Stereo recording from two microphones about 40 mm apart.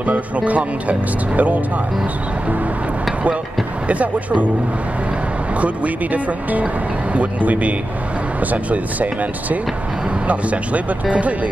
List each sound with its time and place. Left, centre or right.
0.0 s speech: right
3.8 s speech: right
6.6 s speech: right